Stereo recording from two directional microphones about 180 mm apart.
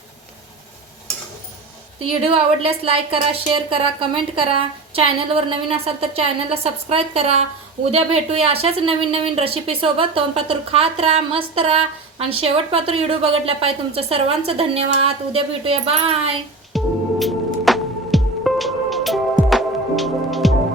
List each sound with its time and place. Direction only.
2.2 s a woman's voice: 35° right (ahead or behind)
16.7 s music: centre (ahead or behind)